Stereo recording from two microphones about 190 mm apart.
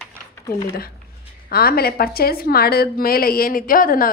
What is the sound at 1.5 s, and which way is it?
A woman's voice, 55° left (ahead or behind).